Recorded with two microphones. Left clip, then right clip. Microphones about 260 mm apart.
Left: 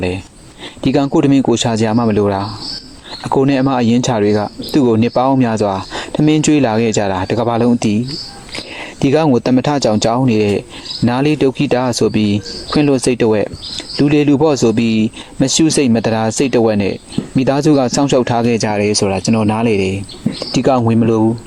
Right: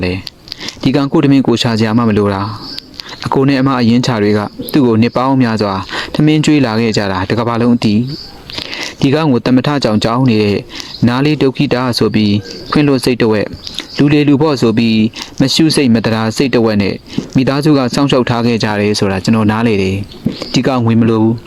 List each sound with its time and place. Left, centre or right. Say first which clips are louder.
0.8 s speech: right 1 dB; right
8.8 s speech: even; right
15.4 s speech: right 2 dB; right
15.8 s speech: right 1 dB; right